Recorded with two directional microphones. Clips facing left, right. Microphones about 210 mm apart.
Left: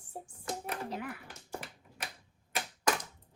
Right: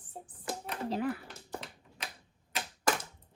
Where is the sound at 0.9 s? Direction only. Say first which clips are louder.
Right 7 dB; 35° right (ahead or behind).